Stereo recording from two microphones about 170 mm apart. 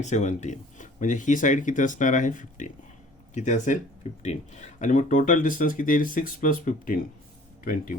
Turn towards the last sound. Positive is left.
turn(degrees=55)  # may be behind; listen again after turning